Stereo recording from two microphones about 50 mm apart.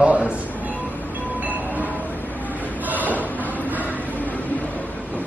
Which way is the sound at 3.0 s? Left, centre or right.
Left.